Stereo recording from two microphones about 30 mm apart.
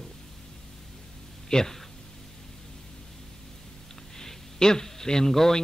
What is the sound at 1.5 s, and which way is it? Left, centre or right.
Speech, centre.